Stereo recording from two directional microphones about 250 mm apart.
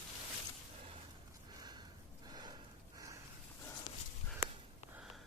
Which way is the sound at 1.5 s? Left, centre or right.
Centre.